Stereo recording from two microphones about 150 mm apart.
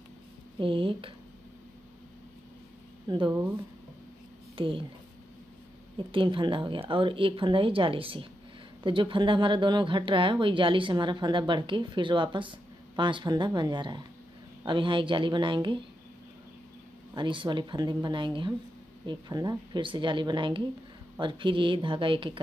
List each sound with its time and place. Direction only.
0.6 s speech: 35° right (ahead or behind)
3.1 s speech: 30° right (ahead or behind)
4.6 s speech: 35° right (ahead or behind)
5.9 s speech: 35° right (ahead or behind)
17.1 s speech: 35° right (ahead or behind)